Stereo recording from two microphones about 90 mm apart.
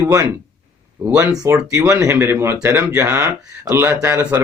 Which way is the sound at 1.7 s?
35° right (ahead or behind).